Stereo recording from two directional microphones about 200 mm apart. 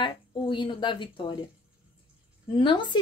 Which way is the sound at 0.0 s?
25° left (ahead or behind).